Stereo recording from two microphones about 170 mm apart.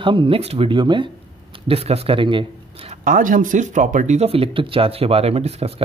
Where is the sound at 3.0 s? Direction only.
50° right (ahead or behind).